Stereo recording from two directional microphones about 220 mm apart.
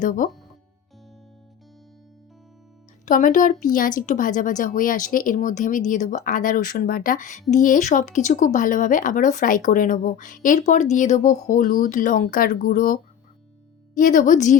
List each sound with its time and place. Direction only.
0.0 s speech: 35° left (ahead or behind)
3.1 s speech: 35° left (ahead or behind)